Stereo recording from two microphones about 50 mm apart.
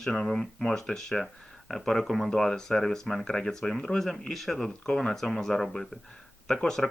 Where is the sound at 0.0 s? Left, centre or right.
Centre.